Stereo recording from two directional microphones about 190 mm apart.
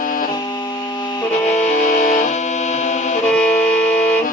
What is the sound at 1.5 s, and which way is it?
Music, 40° left (ahead or behind).